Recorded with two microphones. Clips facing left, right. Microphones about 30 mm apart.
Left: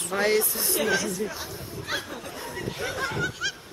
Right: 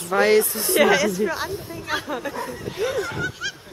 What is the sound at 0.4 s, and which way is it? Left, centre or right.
Speech, centre.